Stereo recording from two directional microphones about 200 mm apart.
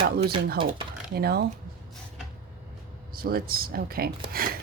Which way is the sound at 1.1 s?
50° right (ahead or behind).